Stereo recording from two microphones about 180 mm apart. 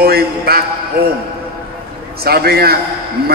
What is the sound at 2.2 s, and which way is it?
Speech, 60° right (ahead or behind).